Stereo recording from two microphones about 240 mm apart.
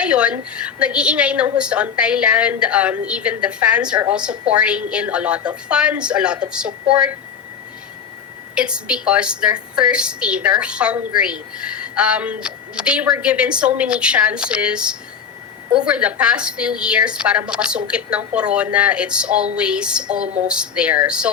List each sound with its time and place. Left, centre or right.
0.0 s a woman's voice: centre
8.5 s a woman's voice: centre